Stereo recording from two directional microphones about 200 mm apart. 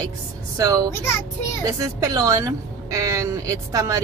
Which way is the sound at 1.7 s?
15° right (ahead or behind).